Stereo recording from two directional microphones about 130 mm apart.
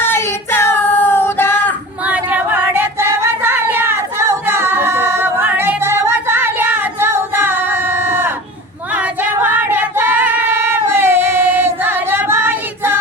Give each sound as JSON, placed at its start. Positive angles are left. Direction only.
{"t": 0.0, "sound": "child singing", "side_deg": 15}
{"t": 2.0, "sound": "a sound", "side_deg": -10}
{"t": 9.0, "sound": "female singing", "side_deg": -15}